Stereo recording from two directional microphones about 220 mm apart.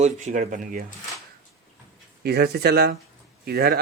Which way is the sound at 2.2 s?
45° right (ahead or behind).